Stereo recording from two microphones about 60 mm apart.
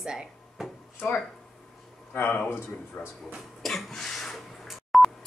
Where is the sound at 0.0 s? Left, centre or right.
Centre.